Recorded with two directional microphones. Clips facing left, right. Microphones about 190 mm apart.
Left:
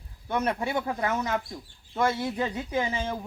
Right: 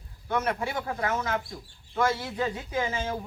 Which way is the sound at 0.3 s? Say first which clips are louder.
Left 1 dB; 15° left (ahead or behind).